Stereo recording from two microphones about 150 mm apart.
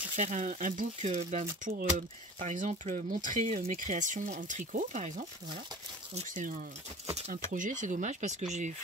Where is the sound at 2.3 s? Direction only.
50° right (ahead or behind).